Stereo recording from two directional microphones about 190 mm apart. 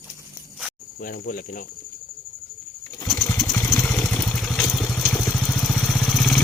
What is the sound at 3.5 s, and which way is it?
Vehicle, 15° left (ahead or behind).